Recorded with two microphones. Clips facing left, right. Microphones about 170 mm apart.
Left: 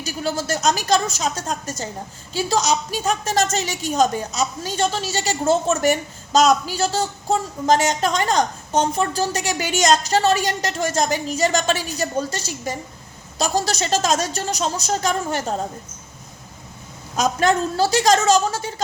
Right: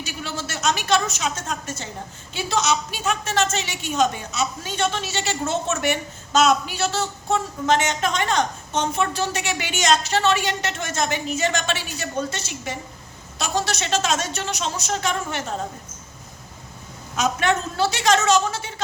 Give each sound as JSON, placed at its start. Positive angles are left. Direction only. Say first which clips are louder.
{"t": 0.0, "sound": "a woman's voice", "louder": "left 6 dB", "side_deg": 40}
{"t": 17.2, "sound": "a woman's voice", "louder": "left 3 dB", "side_deg": 35}